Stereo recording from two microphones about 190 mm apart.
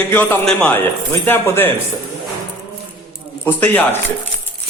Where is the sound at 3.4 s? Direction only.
10° left (ahead or behind).